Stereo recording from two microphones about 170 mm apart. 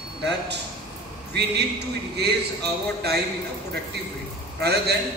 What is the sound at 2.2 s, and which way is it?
A man's voice, 75° right (ahead or behind).